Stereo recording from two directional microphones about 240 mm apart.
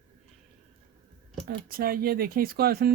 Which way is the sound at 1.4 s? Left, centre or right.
Right.